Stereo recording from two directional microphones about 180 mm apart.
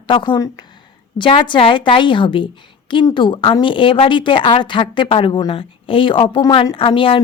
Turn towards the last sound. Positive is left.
turn(degrees=30)  # may be behind; listen again after turning